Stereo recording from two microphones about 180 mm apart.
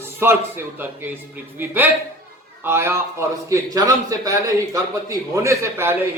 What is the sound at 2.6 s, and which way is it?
A man's voice, 15° right (ahead or behind).